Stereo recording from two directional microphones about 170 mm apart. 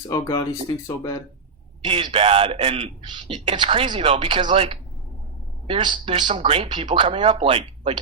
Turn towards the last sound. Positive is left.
turn(degrees=-35)  # may be behind; listen again after turning